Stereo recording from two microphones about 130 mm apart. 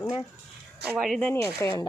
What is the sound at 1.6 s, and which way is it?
Speech, 20° left (ahead or behind).